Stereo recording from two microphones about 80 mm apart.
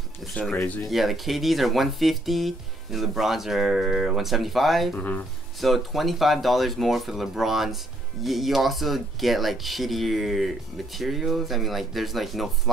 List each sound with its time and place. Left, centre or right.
0.3 s speech: centre
0.8 s speech: centre
4.9 s speech: centre
5.6 s speech: centre